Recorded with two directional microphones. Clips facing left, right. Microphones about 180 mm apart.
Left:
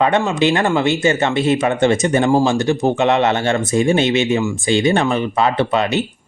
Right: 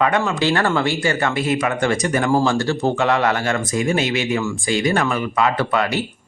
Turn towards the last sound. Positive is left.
turn(degrees=20)  # may be behind; listen again after turning